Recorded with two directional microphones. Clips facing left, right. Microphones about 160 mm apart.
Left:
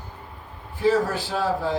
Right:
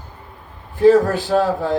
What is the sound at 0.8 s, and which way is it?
Speech, 45° right (ahead or behind).